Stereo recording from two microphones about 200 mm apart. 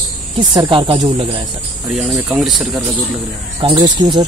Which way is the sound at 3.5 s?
25° right (ahead or behind).